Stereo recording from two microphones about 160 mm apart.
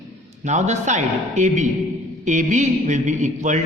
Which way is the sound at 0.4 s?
45° right (ahead or behind).